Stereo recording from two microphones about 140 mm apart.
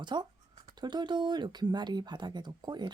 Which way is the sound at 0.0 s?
30° right (ahead or behind).